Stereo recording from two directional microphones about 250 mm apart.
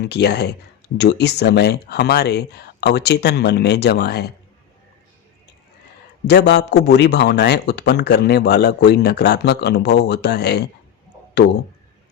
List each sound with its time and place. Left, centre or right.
0.0 s a man's voice: left
6.2 s a man's voice: left